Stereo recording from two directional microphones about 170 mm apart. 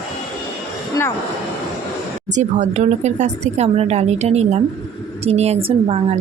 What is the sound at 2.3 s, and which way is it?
Speech, 45° right (ahead or behind).